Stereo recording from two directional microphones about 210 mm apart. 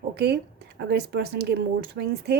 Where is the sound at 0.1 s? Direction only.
50° right (ahead or behind).